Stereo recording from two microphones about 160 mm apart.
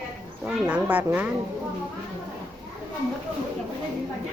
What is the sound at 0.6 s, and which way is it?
Speech, 10° right (ahead or behind).